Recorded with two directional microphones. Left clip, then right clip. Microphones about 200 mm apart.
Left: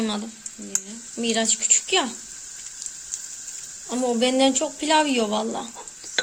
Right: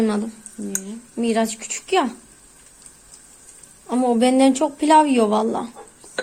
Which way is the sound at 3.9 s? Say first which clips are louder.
Right 4 dB; 5° right (ahead or behind).